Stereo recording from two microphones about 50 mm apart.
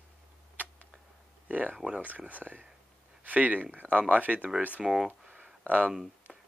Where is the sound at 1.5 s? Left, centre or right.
Right.